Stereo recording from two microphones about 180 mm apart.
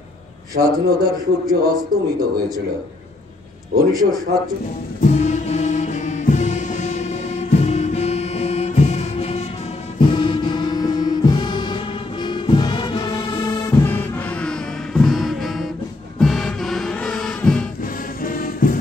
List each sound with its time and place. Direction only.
0.6 s a man's voice: 20° right (ahead or behind)
3.9 s a man's voice: 20° right (ahead or behind)
5.0 s music: 40° left (ahead or behind); by 13.7 s 20° left (ahead or behind)
13.8 s music: 10° left (ahead or behind)
18.2 s music: 50° left (ahead or behind)